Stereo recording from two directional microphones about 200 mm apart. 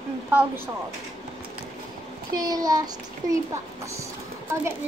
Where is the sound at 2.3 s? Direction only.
20° right (ahead or behind).